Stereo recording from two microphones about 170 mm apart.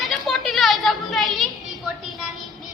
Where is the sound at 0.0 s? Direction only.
Centre (ahead or behind).